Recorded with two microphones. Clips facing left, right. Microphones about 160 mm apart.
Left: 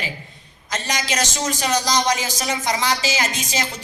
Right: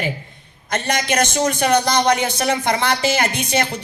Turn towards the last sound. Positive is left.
turn(degrees=-60)  # may be behind; listen again after turning